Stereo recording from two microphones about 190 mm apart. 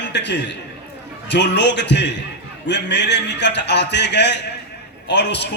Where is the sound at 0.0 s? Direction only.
65° left (ahead or behind).